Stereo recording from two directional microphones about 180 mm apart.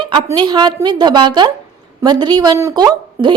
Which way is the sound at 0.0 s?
25° right (ahead or behind).